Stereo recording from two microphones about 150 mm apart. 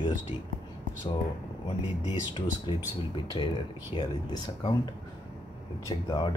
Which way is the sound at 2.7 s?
35° left (ahead or behind).